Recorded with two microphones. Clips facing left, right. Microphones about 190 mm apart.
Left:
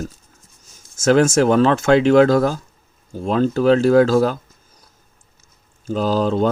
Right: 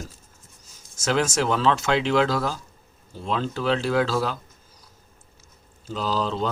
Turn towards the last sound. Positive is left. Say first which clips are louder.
# left 8 dB
turn(degrees=50)  # may be behind; listen again after turning